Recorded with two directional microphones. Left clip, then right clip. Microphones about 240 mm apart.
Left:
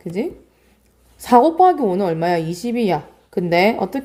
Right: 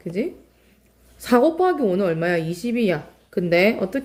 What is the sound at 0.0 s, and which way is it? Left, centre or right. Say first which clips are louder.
A woman's voice: left 2 dB; centre.